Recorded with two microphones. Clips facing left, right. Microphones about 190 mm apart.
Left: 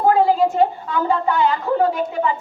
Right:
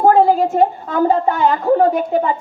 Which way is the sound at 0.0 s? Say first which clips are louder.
Right 4 dB; 50° right (ahead or behind).